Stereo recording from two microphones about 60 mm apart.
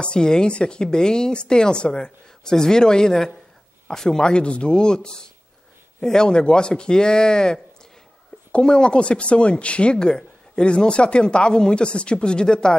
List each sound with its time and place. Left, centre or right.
0.0 s speech: centre